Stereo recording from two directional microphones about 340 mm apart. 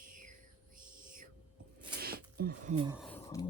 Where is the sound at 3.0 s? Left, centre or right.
Centre.